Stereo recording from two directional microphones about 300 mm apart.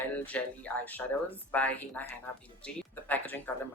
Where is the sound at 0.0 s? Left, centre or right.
Centre.